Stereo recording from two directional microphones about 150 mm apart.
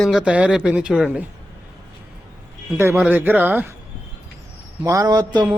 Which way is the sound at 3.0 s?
10° right (ahead or behind).